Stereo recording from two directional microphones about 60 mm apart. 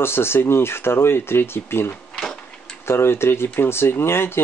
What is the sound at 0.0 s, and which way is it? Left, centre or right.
Speech, left.